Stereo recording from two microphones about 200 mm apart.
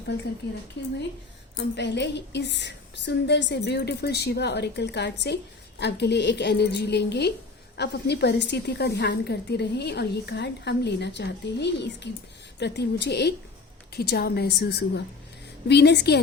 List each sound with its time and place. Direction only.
0.8 s a woman's voice: 60° left (ahead or behind)